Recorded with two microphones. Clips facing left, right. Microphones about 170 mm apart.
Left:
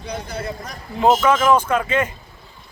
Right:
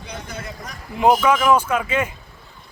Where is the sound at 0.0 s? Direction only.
35° left (ahead or behind).